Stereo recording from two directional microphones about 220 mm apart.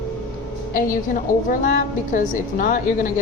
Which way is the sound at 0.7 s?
40° left (ahead or behind).